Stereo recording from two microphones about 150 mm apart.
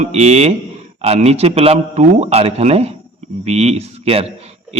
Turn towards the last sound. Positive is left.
turn(degrees=-45)  # may be behind; listen again after turning